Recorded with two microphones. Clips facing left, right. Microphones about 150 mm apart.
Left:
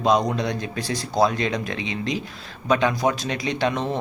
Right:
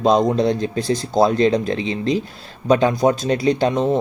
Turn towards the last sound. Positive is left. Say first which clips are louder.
# right 7 dB
turn(degrees=-40)  # may be behind; listen again after turning